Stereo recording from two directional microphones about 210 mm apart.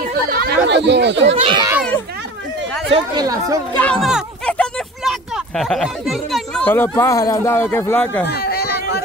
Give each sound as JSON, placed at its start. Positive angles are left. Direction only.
{"t": 0.3, "sound": "chatter", "side_deg": -45}
{"t": 0.7, "sound": "speech", "side_deg": -55}
{"t": 1.3, "sound": "a child's voice", "side_deg": -25}
{"t": 2.9, "sound": "speech", "side_deg": -20}
{"t": 4.0, "sound": "a sound", "side_deg": 0}
{"t": 5.6, "sound": "speech", "side_deg": 0}
{"t": 8.3, "sound": "a sound", "side_deg": 50}